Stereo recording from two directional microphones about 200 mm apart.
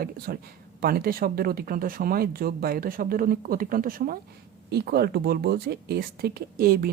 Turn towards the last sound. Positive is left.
turn(degrees=-50)  # may be behind; listen again after turning